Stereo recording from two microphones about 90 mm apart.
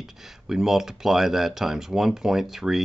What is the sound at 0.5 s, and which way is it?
Speech, 5° right (ahead or behind).